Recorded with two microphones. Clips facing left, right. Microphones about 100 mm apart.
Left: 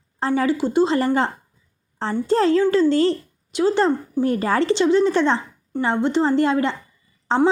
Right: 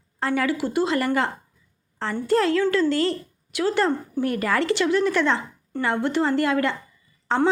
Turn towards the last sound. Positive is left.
turn(degrees=15)  # may be behind; listen again after turning